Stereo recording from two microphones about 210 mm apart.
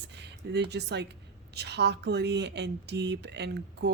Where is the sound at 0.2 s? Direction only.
55° right (ahead or behind).